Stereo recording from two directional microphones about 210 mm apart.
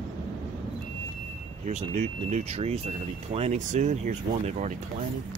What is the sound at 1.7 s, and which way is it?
Speech, 30° right (ahead or behind).